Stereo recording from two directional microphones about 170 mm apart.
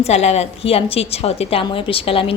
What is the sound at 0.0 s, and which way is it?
A woman's voice, 40° left (ahead or behind).